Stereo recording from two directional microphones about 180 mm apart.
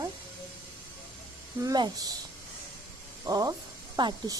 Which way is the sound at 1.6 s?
20° right (ahead or behind).